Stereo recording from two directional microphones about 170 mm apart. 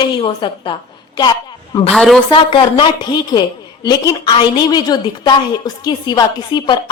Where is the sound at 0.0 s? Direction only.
30° left (ahead or behind).